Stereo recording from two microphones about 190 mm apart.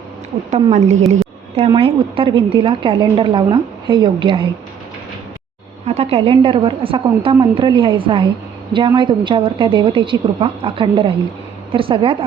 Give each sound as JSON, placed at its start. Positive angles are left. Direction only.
{"t": 0.5, "sound": "a woman's voice", "side_deg": -40}
{"t": 5.8, "sound": "a woman's voice", "side_deg": -35}